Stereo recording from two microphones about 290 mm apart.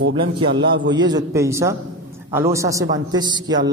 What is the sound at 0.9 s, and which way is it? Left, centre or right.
A woman's voice, centre.